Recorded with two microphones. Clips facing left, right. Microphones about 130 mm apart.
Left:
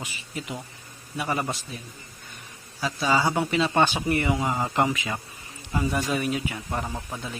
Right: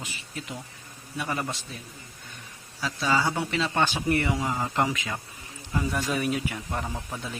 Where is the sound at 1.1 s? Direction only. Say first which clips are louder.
Left 3 dB; 10° left (ahead or behind).